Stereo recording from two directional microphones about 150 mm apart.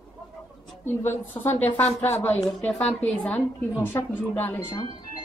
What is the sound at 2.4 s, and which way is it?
A woman's voice, 5° left (ahead or behind).